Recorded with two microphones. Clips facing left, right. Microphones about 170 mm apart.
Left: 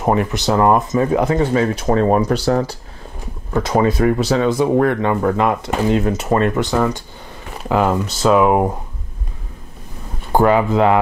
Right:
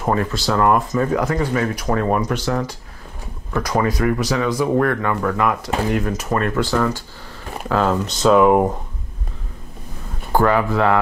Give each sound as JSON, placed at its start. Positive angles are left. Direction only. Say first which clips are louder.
{"t": 0.0, "sound": "speech", "louder": "left 3 dB", "side_deg": 20}
{"t": 10.3, "sound": "speech", "louder": "left 3 dB", "side_deg": 20}